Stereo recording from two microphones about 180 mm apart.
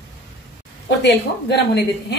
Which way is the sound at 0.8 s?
70° left (ahead or behind).